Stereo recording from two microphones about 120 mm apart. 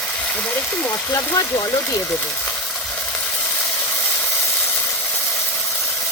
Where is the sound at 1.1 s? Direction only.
25° left (ahead or behind).